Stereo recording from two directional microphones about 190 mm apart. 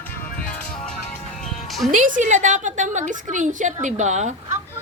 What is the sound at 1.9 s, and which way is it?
A woman's voice, 45° right (ahead or behind).